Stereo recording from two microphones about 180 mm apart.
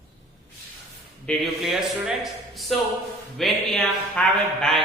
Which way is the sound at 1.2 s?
Centre (ahead or behind).